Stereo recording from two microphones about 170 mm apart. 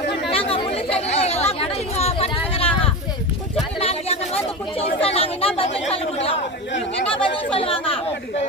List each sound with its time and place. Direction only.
0.3 s chatter: 35° left (ahead or behind)
3.8 s chatter: 35° left (ahead or behind)